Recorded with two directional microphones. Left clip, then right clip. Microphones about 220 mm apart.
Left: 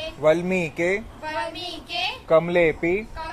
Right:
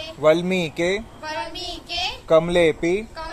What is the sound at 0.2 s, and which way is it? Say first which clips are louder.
A child's voice: right 2 dB; 15° right (ahead or behind).